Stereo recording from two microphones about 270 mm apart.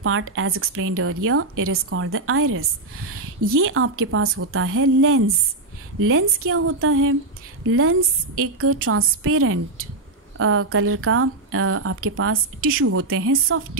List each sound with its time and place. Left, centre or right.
0.0 s a woman's voice: right